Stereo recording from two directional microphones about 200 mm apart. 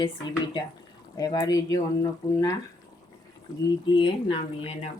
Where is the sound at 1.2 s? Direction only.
20° left (ahead or behind).